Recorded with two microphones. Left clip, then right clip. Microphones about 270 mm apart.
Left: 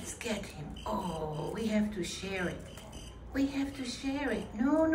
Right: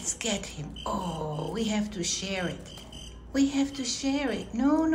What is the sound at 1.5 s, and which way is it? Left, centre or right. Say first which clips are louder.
A woman's voice: right 3 dB; centre.